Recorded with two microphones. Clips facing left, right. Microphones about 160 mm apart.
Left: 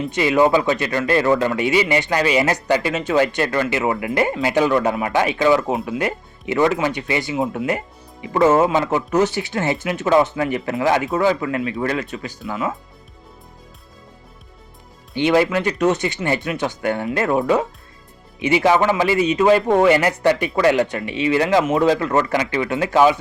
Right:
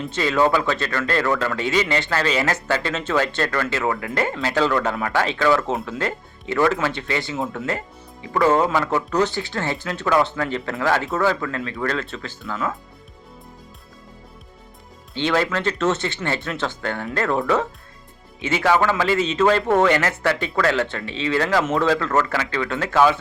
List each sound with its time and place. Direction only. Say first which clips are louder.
0.1 s a man's voice: left 3 dB; 15° left (ahead or behind)
15.1 s a man's voice: left 5 dB; 15° left (ahead or behind)